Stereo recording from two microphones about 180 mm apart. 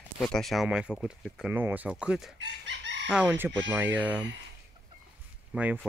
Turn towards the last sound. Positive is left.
turn(degrees=-10)  # may be behind; listen again after turning